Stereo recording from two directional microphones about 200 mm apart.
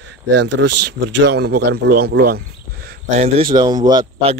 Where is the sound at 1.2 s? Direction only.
55° right (ahead or behind).